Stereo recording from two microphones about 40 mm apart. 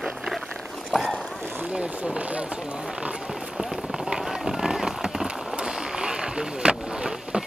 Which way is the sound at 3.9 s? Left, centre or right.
Centre.